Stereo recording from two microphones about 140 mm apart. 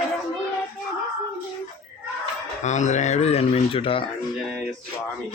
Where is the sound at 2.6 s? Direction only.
60° left (ahead or behind); by 4.0 s 40° left (ahead or behind).